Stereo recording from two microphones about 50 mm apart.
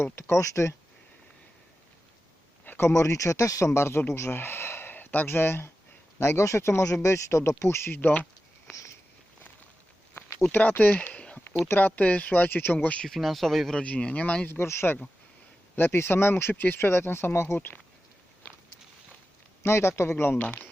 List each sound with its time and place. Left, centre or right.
0.0 s speech: left
2.8 s speech: left
3.8 s speech: left
7.9 s a sound: left
10.5 s speech: left
13.1 s speech: centre
13.7 s speech: left
14.5 s speech: left
19.6 s speech: left
20.4 s speech: left